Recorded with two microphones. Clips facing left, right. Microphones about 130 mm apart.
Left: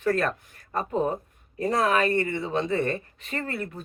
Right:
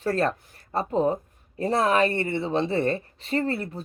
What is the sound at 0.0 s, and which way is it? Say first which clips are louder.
A woman's voice: even; 30° right (ahead or behind).